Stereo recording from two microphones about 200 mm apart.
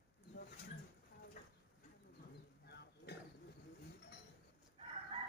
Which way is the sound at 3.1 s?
55° left (ahead or behind).